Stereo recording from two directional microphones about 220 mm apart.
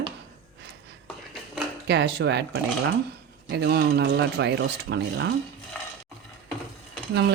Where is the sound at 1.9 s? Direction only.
50° right (ahead or behind).